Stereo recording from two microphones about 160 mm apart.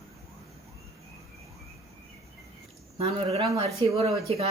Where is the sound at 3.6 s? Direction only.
40° right (ahead or behind).